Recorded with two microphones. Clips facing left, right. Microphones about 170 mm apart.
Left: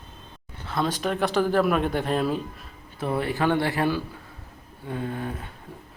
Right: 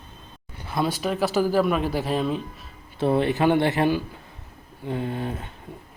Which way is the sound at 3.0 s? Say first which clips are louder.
Right 5 dB; 25° right (ahead or behind).